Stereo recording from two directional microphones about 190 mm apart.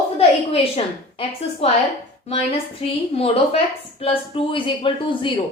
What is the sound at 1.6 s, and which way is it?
Speech, 30° left (ahead or behind).